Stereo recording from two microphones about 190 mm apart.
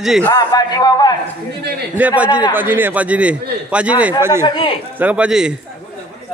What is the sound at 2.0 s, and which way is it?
A man's voice, 10° right (ahead or behind).